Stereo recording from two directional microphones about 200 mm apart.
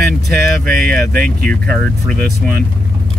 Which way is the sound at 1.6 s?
5° left (ahead or behind).